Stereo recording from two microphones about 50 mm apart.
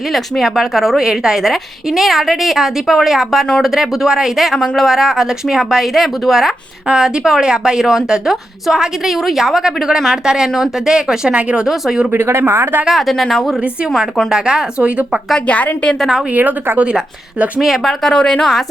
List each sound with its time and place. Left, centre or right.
0.1 s a woman's voice: centre
4.5 s a woman's voice: centre
4.8 s a woman's voice: centre
12.1 s speech: right
12.8 s a woman's voice: centre
14.3 s a woman's voice: centre
15.4 s a woman's voice: left
16.3 s speech: right
16.7 s speech: right
17.6 s a woman's voice: centre
18.0 s a woman's voice: centre